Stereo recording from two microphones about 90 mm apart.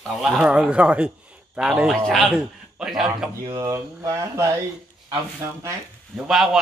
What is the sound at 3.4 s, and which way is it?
Speech, 35° right (ahead or behind).